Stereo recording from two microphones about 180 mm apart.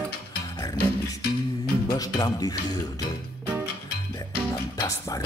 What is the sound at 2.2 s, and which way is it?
Speech, 20° left (ahead or behind).